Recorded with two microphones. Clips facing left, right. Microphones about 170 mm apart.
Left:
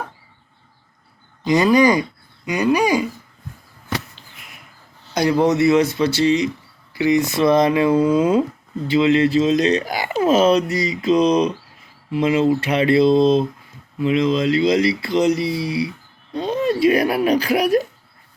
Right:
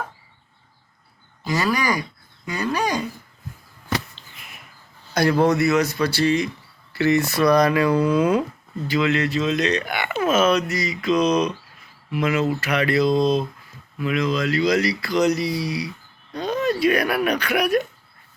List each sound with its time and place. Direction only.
1.5 s speech: 20° left (ahead or behind)
5.1 s speech: 15° left (ahead or behind)